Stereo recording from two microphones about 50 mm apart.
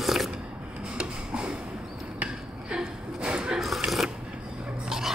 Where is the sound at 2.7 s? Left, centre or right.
Centre.